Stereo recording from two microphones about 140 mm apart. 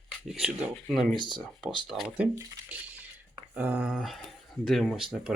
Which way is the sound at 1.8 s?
Centre (ahead or behind).